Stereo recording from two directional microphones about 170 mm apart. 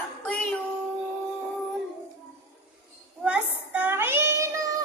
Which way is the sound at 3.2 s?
10° right (ahead or behind).